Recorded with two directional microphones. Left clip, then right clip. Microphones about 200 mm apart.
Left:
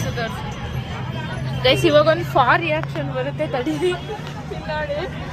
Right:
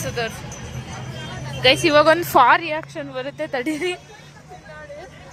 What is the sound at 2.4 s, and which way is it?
A woman's voice, 35° right (ahead or behind).